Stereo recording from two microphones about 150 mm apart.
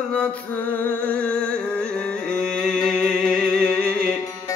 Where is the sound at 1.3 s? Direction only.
5° left (ahead or behind).